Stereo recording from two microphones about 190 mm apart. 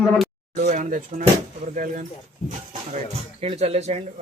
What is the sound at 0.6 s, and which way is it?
Speech, 40° right (ahead or behind).